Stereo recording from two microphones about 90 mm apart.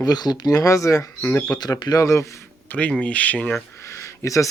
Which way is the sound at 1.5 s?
50° left (ahead or behind).